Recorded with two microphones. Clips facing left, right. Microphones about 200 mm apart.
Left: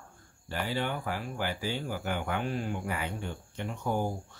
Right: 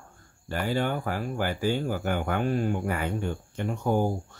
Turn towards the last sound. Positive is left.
turn(degrees=-45)  # may be behind; listen again after turning